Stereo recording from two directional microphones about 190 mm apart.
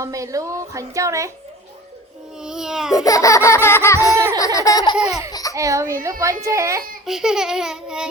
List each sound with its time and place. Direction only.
0.0 s a woman's voice: 15° right (ahead or behind)
2.4 s baby cry: 5° right (ahead or behind)
2.9 s laughter: 15° left (ahead or behind)
5.3 s a sound: 20° left (ahead or behind)
5.5 s a woman's voice: 15° right (ahead or behind)
7.0 s a sound: centre (ahead or behind)